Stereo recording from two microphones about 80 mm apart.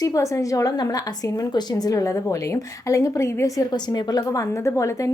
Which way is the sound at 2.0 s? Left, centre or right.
Left.